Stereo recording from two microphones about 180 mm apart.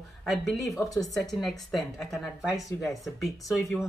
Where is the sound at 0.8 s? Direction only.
20° left (ahead or behind).